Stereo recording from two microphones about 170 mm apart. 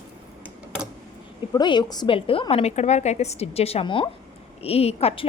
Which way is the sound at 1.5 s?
25° left (ahead or behind).